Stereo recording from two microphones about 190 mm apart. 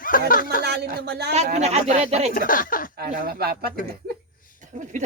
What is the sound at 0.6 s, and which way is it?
Speech, 60° right (ahead or behind).